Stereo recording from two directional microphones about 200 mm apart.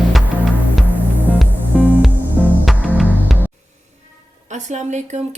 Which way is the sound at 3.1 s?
10° left (ahead or behind).